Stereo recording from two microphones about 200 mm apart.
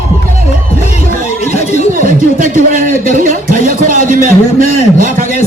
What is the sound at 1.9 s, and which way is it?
A man's voice, 45° right (ahead or behind).